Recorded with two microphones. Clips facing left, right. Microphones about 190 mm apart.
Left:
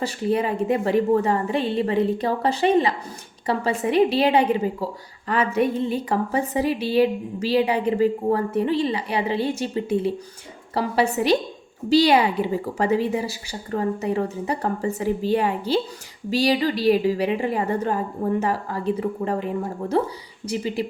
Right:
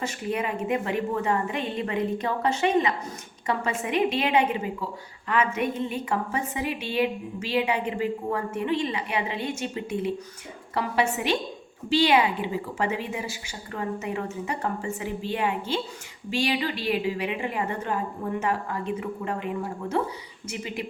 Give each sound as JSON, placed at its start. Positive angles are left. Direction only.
{"t": 0.0, "sound": "a woman's voice", "side_deg": 35}